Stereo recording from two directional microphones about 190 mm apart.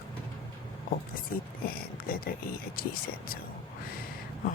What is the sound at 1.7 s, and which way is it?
Speech, 50° left (ahead or behind).